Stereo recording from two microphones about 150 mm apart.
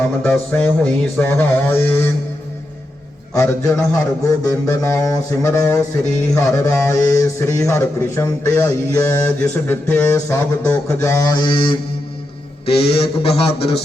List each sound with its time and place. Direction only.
0.2 s speech: 10° left (ahead or behind)
3.3 s a man's voice: 15° left (ahead or behind); by 13.7 s 40° left (ahead or behind)